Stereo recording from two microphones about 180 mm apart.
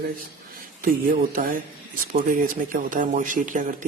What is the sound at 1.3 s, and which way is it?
Speech, 50° right (ahead or behind).